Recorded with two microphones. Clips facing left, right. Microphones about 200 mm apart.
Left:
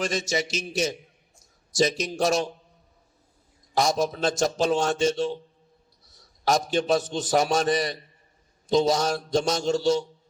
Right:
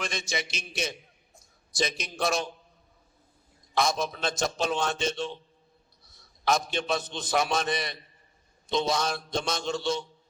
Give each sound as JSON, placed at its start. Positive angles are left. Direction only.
{"t": 0.0, "sound": "a man's voice", "side_deg": 40}
{"t": 3.8, "sound": "a man's voice", "side_deg": 40}